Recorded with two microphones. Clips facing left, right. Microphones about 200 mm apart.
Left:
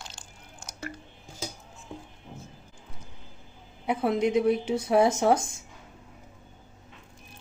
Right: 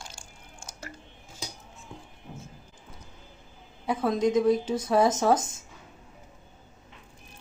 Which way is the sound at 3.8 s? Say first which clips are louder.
Even; 20° left (ahead or behind).